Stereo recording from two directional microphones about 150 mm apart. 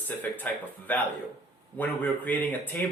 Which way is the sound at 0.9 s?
10° left (ahead or behind).